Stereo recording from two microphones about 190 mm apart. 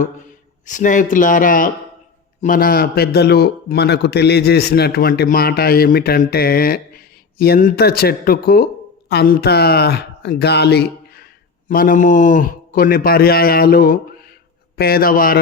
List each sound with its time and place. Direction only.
0.6 s a man's voice: 40° left (ahead or behind); by 11.3 s 55° left (ahead or behind)
11.7 s a man's voice: 45° left (ahead or behind)